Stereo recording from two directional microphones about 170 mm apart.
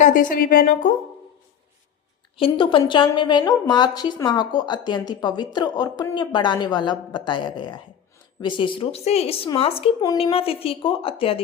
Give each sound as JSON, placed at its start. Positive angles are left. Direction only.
{"t": 0.0, "sound": "a woman's voice", "side_deg": 55}
{"t": 2.4, "sound": "a woman's voice", "side_deg": 30}